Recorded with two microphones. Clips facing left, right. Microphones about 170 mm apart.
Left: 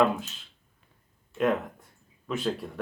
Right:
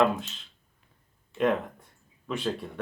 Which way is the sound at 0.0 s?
5° left (ahead or behind).